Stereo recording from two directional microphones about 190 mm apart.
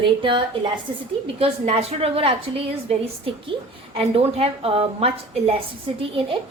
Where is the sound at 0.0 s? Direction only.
25° right (ahead or behind).